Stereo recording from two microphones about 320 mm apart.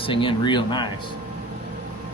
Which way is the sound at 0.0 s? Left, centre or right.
Centre.